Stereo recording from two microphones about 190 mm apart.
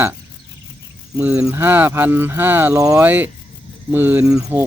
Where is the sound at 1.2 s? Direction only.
5° right (ahead or behind).